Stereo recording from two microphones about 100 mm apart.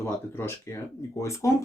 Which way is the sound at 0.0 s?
25° left (ahead or behind).